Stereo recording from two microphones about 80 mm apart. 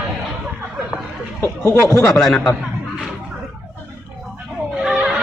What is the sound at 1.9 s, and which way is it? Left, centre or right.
Speech, left.